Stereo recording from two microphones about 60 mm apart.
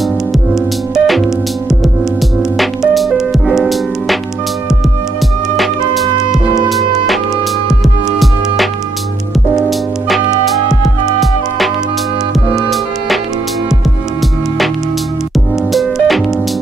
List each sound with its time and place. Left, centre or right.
0.9 s music: centre
2.5 s music: centre
5.6 s music: centre
7.8 s music: centre
12.5 s music: centre
15.7 s music: centre